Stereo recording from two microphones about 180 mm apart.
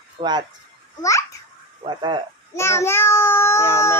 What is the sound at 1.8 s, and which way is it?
Speech, 25° right (ahead or behind).